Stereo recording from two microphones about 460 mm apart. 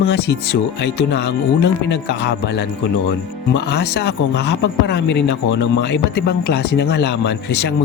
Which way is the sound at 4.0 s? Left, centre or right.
Left.